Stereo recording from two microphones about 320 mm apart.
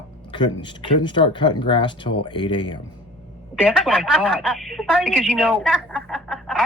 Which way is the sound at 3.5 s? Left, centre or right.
Centre.